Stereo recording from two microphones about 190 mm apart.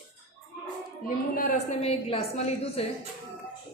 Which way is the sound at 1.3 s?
45° left (ahead or behind).